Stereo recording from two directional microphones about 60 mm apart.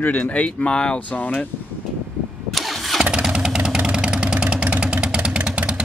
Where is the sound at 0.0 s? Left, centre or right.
Left.